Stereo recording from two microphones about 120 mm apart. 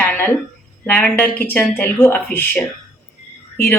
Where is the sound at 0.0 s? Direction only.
15° left (ahead or behind).